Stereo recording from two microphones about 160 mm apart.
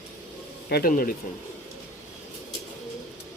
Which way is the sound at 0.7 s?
70° left (ahead or behind).